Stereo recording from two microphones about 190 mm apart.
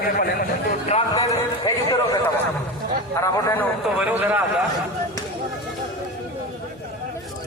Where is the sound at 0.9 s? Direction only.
35° left (ahead or behind).